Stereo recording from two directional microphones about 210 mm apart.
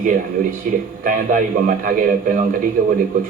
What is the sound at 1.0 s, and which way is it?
A man's voice, 40° right (ahead or behind).